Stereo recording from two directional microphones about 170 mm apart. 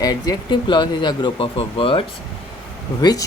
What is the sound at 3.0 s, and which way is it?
Speech, 20° left (ahead or behind).